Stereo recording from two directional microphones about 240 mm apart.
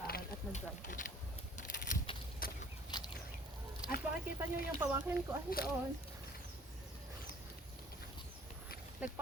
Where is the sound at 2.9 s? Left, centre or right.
Centre.